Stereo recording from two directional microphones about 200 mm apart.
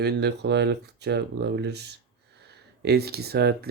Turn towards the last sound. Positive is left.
turn(degrees=-55)  # may be behind; listen again after turning